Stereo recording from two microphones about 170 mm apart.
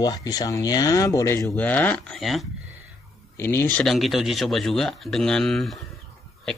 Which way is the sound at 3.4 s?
15° left (ahead or behind).